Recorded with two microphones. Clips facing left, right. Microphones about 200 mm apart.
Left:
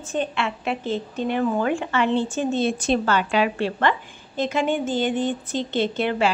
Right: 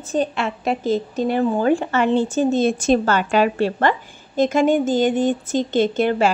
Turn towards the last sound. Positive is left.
turn(degrees=-45)  # may be behind; listen again after turning